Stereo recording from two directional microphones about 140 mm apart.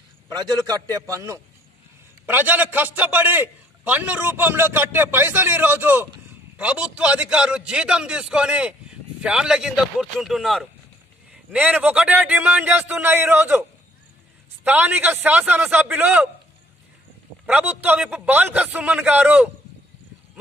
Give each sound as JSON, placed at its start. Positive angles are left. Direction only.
{"t": 0.3, "sound": "a man's voice", "side_deg": -30}
{"t": 17.5, "sound": "a man's voice", "side_deg": -10}